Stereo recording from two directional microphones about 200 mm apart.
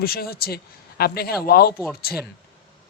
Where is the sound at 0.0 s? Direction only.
50° left (ahead or behind).